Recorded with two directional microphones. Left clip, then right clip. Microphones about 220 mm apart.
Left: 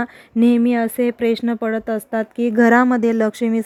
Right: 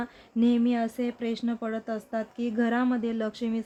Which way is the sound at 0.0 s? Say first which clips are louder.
Left 10 dB; 45° left (ahead or behind).